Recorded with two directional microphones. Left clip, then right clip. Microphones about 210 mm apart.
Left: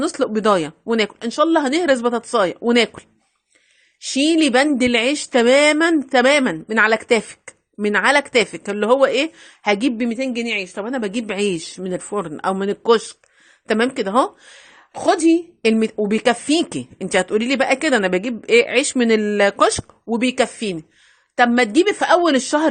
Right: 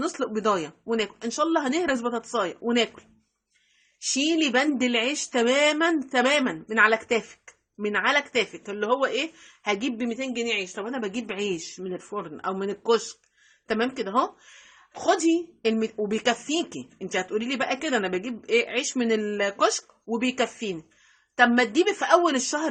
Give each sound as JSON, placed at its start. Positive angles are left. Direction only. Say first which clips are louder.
{"t": 0.0, "sound": "a woman's voice", "louder": "left 8 dB", "side_deg": 35}
{"t": 4.0, "sound": "a woman's voice", "louder": "left 7 dB", "side_deg": 35}